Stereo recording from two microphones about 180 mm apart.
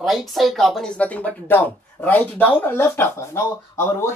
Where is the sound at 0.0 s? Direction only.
Centre (ahead or behind).